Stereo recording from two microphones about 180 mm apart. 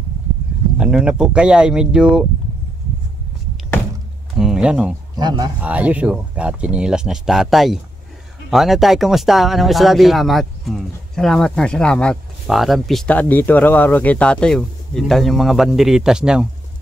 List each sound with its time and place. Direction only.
0.7 s speech: 5° right (ahead or behind)
4.4 s speech: 5° right (ahead or behind)
5.1 s speech: 20° right (ahead or behind)
5.6 s speech: 10° right (ahead or behind)